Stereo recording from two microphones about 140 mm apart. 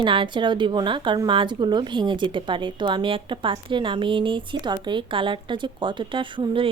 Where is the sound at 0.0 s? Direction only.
35° right (ahead or behind).